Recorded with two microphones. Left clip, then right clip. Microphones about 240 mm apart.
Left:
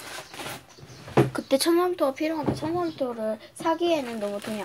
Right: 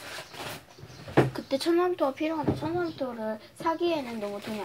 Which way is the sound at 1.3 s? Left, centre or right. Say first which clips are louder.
Left 5 dB; left.